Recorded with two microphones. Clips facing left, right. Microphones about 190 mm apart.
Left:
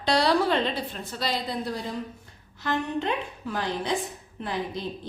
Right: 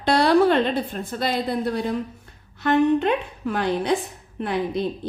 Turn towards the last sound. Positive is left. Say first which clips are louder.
# right 7 dB
turn(degrees=-60)  # may be behind; listen again after turning